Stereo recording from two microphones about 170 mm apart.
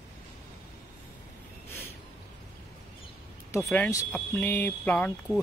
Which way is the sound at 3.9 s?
15° left (ahead or behind).